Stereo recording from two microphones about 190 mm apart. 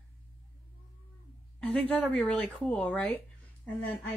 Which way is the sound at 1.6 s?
5° left (ahead or behind).